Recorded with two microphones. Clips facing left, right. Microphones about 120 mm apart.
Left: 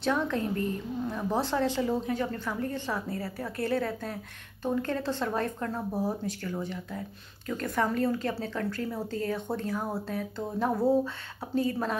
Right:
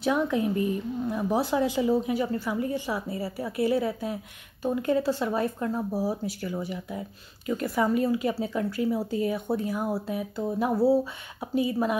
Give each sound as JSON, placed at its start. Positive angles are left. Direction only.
{"t": 0.0, "sound": "speech", "side_deg": -10}